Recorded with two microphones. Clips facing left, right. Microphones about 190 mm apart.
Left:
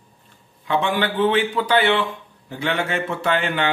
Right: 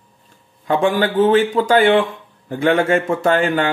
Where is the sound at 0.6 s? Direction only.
45° right (ahead or behind).